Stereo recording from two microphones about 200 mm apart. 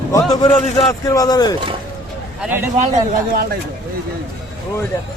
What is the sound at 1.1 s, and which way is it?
Speech, 20° left (ahead or behind).